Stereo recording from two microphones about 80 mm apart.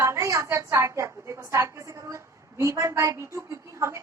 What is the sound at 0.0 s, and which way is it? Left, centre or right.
A woman's voice, right.